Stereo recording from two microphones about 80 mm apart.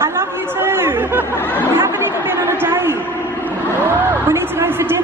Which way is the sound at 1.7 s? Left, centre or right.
Right.